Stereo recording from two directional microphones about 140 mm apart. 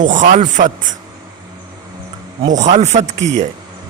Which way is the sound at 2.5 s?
55° right (ahead or behind).